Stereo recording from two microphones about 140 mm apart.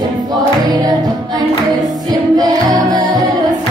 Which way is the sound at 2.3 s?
25° right (ahead or behind).